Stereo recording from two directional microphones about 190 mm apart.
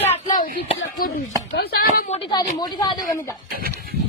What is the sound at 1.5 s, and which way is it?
Speech, 55° left (ahead or behind).